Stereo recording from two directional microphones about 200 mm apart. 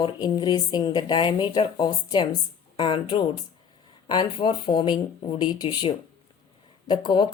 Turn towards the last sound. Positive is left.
turn(degrees=20)  # may be behind; listen again after turning